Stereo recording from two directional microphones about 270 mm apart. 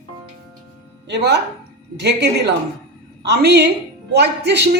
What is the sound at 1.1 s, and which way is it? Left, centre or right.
A woman's voice, right.